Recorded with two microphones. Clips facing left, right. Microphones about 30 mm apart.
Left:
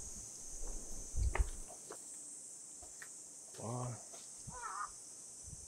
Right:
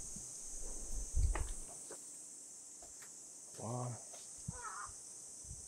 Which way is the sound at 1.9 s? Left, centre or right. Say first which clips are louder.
Left 3 dB; left.